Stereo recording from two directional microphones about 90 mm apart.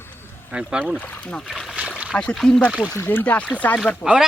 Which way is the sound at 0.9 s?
20° left (ahead or behind).